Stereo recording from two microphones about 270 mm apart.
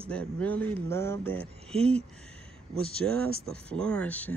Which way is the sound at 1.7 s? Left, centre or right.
Right.